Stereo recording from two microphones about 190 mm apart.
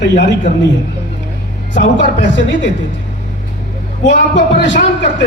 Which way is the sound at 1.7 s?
70° left (ahead or behind).